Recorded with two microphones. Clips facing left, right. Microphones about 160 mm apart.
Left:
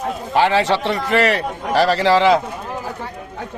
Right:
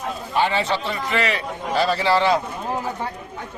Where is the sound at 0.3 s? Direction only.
90° left.